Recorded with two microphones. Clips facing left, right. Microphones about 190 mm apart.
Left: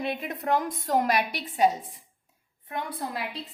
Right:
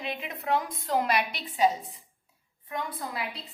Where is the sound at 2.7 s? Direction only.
60° left (ahead or behind).